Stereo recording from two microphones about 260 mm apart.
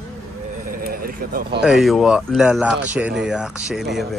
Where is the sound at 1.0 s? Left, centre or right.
Right.